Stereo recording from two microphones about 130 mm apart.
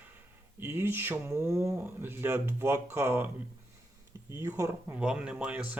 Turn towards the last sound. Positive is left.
turn(degrees=-10)  # may be behind; listen again after turning